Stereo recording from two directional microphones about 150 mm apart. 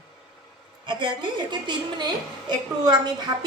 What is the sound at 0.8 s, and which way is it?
A woman's voice, 30° right (ahead or behind).